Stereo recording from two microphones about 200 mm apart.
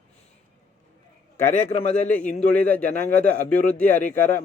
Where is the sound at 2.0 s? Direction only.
5° left (ahead or behind).